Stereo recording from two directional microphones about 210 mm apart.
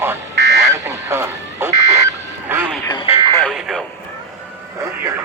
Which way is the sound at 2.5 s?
10° right (ahead or behind).